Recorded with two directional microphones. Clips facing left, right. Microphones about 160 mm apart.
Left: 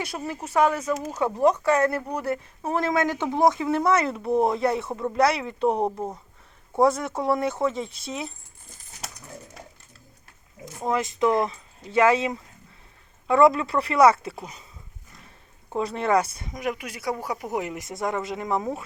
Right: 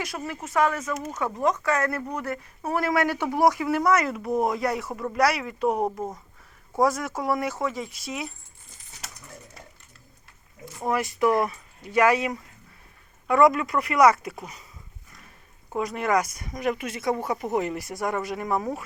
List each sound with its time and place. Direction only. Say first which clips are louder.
0.0 s speech: left 1 dB; 30° left (ahead or behind)
6.7 s speech: left 2 dB; 25° left (ahead or behind)
10.8 s speech: left 1 dB; 20° left (ahead or behind)
15.8 s speech: left 2 dB; 30° left (ahead or behind)
16.6 s speech: right 3 dB; 10° left (ahead or behind)